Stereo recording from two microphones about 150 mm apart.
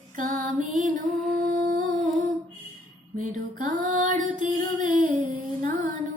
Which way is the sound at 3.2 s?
60° right (ahead or behind).